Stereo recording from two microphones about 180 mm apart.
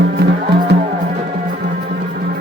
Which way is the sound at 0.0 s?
60° right (ahead or behind).